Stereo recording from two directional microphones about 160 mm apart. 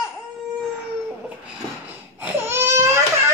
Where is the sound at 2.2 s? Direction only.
15° right (ahead or behind).